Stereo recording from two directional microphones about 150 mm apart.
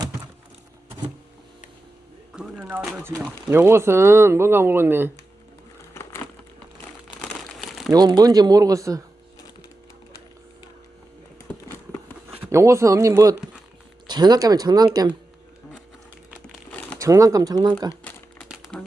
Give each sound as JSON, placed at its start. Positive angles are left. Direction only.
{"t": 2.3, "sound": "a sound", "side_deg": -5}
{"t": 3.2, "sound": "speech", "side_deg": -15}
{"t": 5.9, "sound": "a sound", "side_deg": 15}
{"t": 7.2, "sound": "crumpling", "side_deg": 0}
{"t": 7.9, "sound": "speech", "side_deg": -25}
{"t": 12.4, "sound": "speech", "side_deg": -20}
{"t": 17.0, "sound": "speech", "side_deg": -20}
{"t": 18.7, "sound": "crumpling", "side_deg": 10}